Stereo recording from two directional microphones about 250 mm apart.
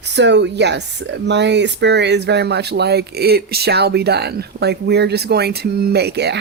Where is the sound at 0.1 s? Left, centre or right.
Right.